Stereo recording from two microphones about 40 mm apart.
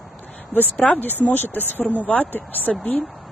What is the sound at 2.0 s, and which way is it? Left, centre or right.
Speech, left.